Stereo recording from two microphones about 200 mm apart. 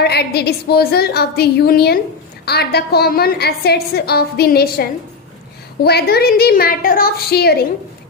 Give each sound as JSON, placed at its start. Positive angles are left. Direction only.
{"t": 0.0, "sound": "a woman's voice", "side_deg": 55}